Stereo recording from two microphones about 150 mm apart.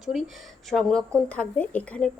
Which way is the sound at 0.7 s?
Centre (ahead or behind).